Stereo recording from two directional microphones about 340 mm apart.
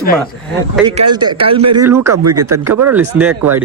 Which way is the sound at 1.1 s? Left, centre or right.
Centre.